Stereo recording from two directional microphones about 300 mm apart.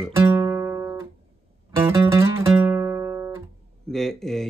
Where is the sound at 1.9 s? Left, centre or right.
Centre.